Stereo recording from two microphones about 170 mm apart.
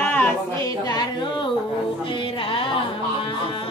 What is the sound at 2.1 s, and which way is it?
Music, 30° left (ahead or behind).